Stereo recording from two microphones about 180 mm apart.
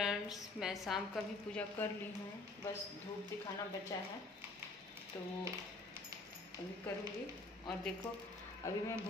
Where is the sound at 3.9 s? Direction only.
20° left (ahead or behind).